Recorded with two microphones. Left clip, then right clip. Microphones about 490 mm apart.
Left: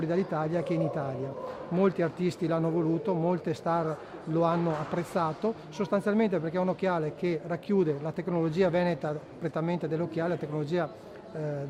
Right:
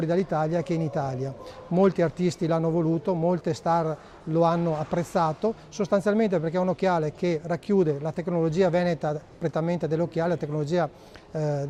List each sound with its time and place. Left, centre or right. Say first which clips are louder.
0.0 s speech: right 4 dB; right
11.3 s speech: right 7 dB; right